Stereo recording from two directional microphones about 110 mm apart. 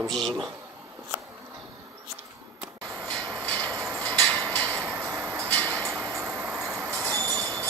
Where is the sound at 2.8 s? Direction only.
30° right (ahead or behind).